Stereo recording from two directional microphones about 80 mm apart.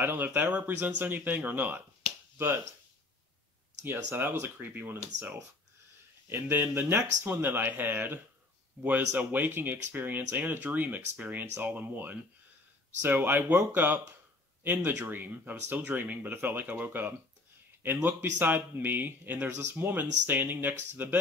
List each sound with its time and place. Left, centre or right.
0.0 s speech: right
3.8 s speech: right